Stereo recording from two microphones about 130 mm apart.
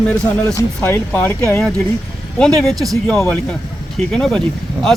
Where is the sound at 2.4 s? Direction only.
Centre (ahead or behind).